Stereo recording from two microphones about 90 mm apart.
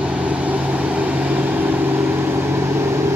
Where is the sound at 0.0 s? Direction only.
15° right (ahead or behind).